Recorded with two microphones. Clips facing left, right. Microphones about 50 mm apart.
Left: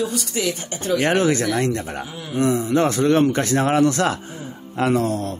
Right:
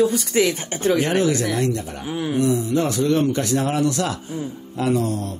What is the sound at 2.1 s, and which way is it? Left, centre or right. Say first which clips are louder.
Speech: right 8 dB; right.